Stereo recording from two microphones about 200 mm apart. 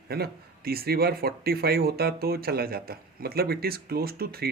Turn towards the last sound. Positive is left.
turn(degrees=-50)  # may be behind; listen again after turning